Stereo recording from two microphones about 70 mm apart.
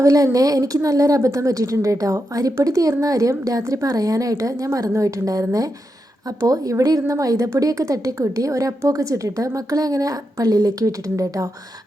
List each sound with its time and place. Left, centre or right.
0.0 s a woman's voice: right